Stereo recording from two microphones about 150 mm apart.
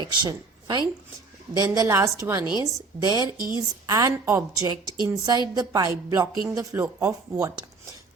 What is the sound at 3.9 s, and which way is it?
A woman's voice, 20° right (ahead or behind).